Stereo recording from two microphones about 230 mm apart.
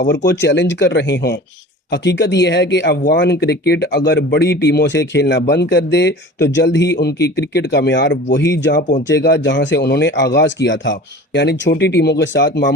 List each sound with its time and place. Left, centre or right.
0.4 s speech: left